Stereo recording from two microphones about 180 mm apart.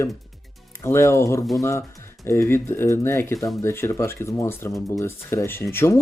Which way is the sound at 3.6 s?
15° left (ahead or behind).